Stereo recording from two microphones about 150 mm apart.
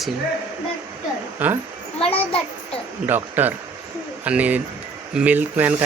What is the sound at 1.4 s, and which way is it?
Speech, 10° right (ahead or behind).